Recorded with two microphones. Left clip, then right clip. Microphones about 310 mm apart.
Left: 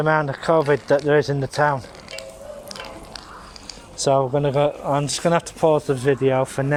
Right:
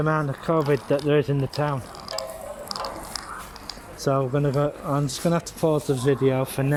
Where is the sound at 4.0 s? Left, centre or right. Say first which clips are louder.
Left 5 dB; left.